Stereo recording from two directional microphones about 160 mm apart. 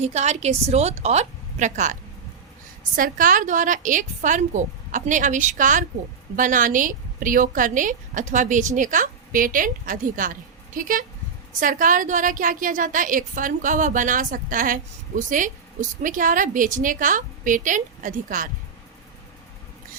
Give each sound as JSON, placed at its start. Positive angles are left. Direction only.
{"t": 0.0, "sound": "a woman's voice", "side_deg": -45}